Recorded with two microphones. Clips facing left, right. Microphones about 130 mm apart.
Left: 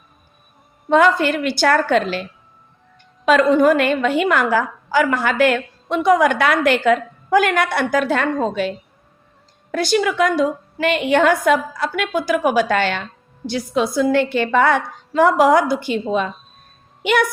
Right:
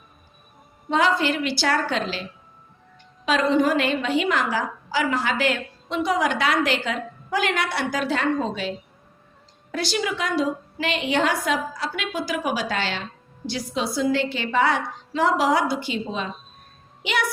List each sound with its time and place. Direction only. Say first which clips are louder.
0.9 s a woman's voice: left 6 dB; 55° left (ahead or behind)
3.2 s a woman's voice: left 7 dB; 50° left (ahead or behind)
9.7 s a woman's voice: left 8 dB; 50° left (ahead or behind)